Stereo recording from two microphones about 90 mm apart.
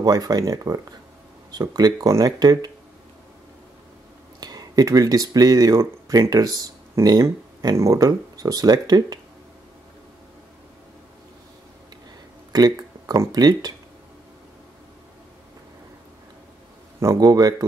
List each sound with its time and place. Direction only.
0.0 s speech: 45° right (ahead or behind)
4.4 s speech: 45° right (ahead or behind)
12.5 s speech: 45° right (ahead or behind)
17.0 s speech: 40° right (ahead or behind)